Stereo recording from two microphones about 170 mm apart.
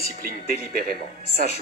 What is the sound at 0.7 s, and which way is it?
Speech, 60° right (ahead or behind).